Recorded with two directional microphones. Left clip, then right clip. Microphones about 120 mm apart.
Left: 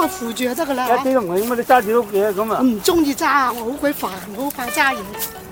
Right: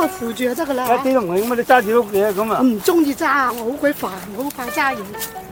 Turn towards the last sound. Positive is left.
turn(degrees=5)  # may be behind; listen again after turning